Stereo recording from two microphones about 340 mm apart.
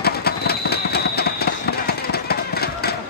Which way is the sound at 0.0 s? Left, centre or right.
Left.